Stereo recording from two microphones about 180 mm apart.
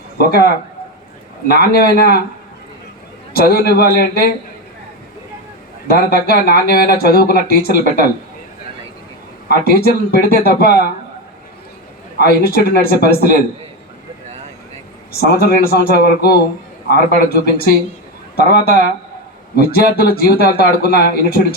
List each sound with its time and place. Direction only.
0.2 s speech: 60° left (ahead or behind)
3.3 s speech: 55° left (ahead or behind)
5.9 s speech: 60° left (ahead or behind)
9.5 s speech: 60° left (ahead or behind)
12.1 s speech: 60° left (ahead or behind)
15.1 s speech: 55° left (ahead or behind)